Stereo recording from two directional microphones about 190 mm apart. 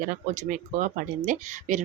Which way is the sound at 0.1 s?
45° right (ahead or behind).